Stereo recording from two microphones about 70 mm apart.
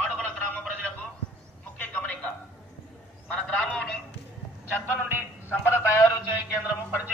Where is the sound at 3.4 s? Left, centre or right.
Centre.